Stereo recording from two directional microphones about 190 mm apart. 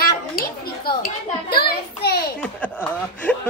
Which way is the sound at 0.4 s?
50° left (ahead or behind).